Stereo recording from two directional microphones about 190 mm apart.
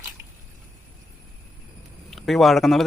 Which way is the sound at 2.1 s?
Centre (ahead or behind).